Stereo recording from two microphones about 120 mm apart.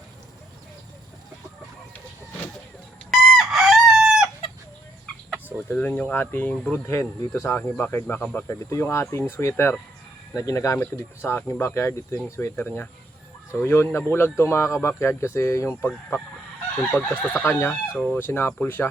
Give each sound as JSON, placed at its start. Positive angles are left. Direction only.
{"t": 3.1, "sound": "chicken", "side_deg": 0}
{"t": 4.4, "sound": "chicken", "side_deg": 50}
{"t": 5.5, "sound": "speech", "side_deg": 15}